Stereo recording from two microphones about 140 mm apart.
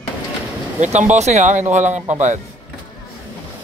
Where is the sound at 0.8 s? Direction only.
55° right (ahead or behind).